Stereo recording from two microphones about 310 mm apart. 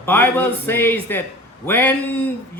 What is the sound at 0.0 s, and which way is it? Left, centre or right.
A man's voice, centre.